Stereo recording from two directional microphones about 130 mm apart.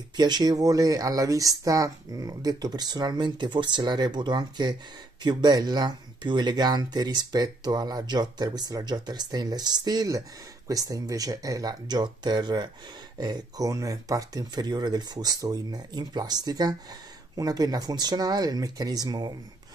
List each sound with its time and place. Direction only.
0.1 s speech: 35° right (ahead or behind)